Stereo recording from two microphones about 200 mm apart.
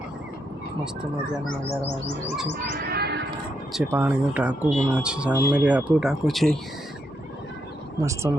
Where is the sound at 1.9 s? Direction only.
Centre (ahead or behind).